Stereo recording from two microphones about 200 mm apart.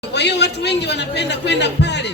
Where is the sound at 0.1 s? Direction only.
55° left (ahead or behind).